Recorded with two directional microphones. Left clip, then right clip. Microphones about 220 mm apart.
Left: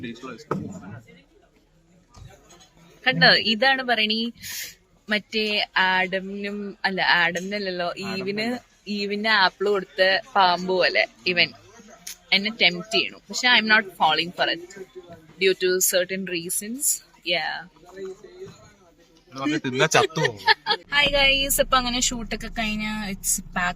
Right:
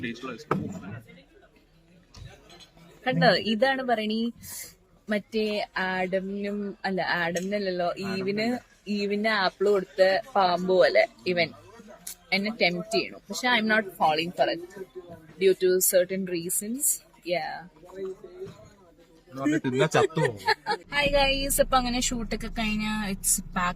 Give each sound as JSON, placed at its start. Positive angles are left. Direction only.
{"t": 0.0, "sound": "speech", "side_deg": 5}
{"t": 3.0, "sound": "a woman's voice", "side_deg": -5}
{"t": 8.0, "sound": "speech", "side_deg": 40}
{"t": 8.3, "sound": "a woman's voice", "side_deg": -5}
{"t": 10.8, "sound": "a woman's voice", "side_deg": -25}
{"t": 19.4, "sound": "speech", "side_deg": 20}
{"t": 20.2, "sound": "a woman's voice", "side_deg": -10}